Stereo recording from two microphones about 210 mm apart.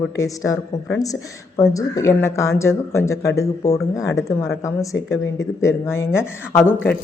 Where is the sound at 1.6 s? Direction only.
15° left (ahead or behind).